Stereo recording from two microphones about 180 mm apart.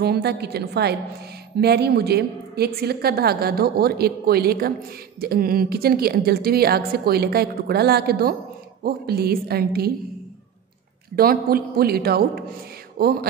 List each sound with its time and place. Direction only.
0.0 s a woman's voice: 65° right (ahead or behind)
11.1 s a woman's voice: 55° right (ahead or behind)
12.9 s a sound: 55° right (ahead or behind)